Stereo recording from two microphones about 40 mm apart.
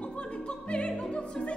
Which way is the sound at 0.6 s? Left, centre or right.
Left.